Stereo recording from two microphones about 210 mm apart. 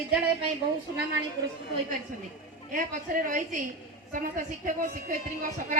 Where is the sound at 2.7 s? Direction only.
40° right (ahead or behind).